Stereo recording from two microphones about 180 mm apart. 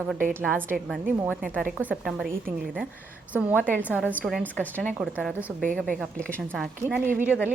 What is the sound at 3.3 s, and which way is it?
Speech, 10° right (ahead or behind).